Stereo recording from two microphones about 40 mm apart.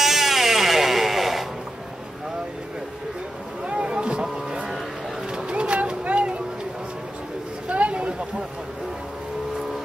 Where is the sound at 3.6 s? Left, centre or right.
Right.